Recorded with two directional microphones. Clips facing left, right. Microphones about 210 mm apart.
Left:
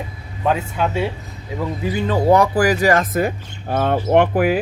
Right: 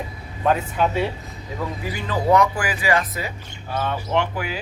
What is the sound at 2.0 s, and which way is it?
Speech, 30° left (ahead or behind).